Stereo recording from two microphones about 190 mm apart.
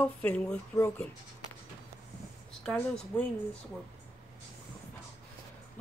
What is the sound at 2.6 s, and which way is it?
Speech, 5° left (ahead or behind).